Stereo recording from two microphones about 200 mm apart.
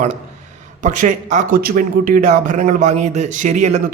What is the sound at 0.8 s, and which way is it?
A man's voice, 40° right (ahead or behind).